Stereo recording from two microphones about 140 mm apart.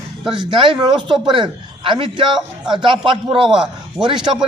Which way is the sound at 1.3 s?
35° right (ahead or behind).